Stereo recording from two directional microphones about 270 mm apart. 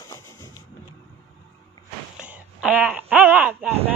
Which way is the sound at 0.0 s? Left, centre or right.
Centre.